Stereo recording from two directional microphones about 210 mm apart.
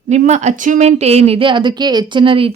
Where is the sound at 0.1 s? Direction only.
35° right (ahead or behind).